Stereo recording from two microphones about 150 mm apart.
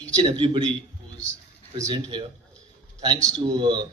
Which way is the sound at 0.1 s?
30° right (ahead or behind).